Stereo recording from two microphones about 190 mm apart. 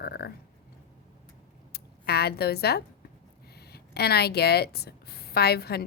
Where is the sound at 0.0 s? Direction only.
55° left (ahead or behind).